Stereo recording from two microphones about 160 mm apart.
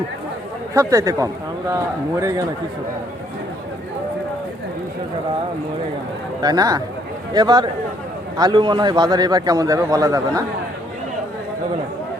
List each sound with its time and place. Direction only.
0.7 s a man's voice: 20° right (ahead or behind)
6.4 s a man's voice: 25° right (ahead or behind)